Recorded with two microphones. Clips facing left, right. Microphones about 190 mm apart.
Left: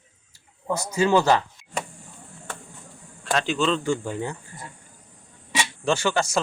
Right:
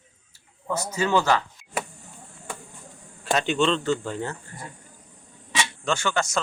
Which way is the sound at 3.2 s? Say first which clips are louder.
Right 1 dB; centre (ahead or behind).